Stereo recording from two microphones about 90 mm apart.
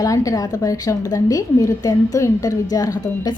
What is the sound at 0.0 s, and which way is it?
A woman's voice, 40° left (ahead or behind).